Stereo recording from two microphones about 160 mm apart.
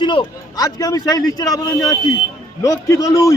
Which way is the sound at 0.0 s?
30° left (ahead or behind).